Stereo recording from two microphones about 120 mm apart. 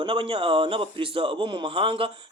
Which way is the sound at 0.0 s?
45° right (ahead or behind).